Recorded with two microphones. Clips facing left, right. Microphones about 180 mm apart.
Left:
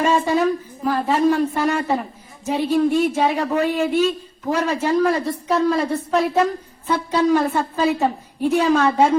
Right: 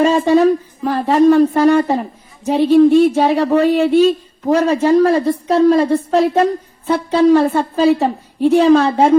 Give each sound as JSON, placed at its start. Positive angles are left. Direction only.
{"t": 0.0, "sound": "speech", "side_deg": -35}